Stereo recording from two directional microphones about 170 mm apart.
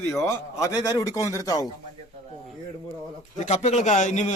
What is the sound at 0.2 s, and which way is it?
A man's voice, 15° left (ahead or behind).